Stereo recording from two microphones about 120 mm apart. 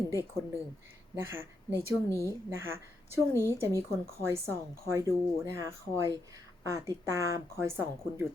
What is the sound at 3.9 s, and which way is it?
Speech, 20° right (ahead or behind).